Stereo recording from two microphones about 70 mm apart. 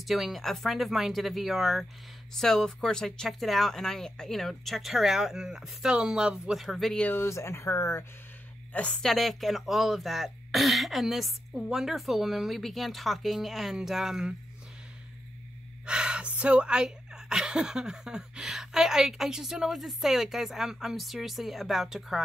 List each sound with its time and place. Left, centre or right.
0.0 s speech: centre
7.2 s speech: left
8.7 s a woman's voice: centre
9.0 s speech: centre
15.8 s speech: centre